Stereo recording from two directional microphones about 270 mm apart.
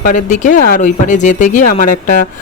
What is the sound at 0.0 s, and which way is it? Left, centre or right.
Speech, left.